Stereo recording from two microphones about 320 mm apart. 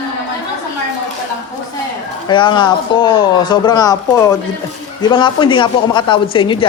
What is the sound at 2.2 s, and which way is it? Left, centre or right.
Speech, centre.